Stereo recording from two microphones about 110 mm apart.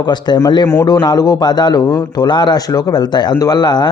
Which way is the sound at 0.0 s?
40° left (ahead or behind).